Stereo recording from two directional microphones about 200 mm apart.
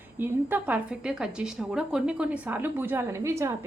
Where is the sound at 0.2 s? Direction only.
10° right (ahead or behind).